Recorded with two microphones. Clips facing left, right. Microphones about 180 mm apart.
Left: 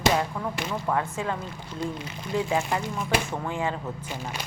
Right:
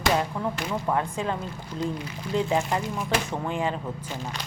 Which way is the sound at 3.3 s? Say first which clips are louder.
Right 1 dB; 15° right (ahead or behind).